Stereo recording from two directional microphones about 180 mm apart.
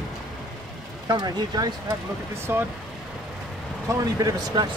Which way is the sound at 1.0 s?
20° right (ahead or behind).